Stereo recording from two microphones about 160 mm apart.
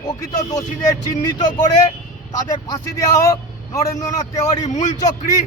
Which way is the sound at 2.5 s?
20° left (ahead or behind).